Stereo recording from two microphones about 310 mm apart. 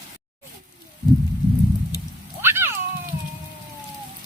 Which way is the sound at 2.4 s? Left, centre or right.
Centre.